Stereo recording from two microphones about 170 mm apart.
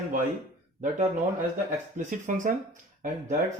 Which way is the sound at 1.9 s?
50° right (ahead or behind).